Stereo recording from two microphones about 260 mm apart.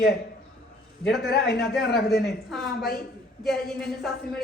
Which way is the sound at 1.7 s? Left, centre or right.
Centre.